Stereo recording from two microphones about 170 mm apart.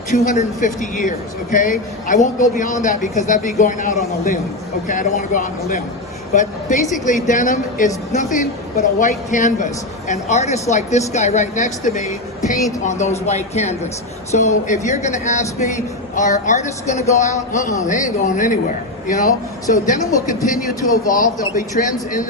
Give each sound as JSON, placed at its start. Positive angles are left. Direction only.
{"t": 0.1, "sound": "a man's voice", "side_deg": 45}
{"t": 21.1, "sound": "a man's voice", "side_deg": 50}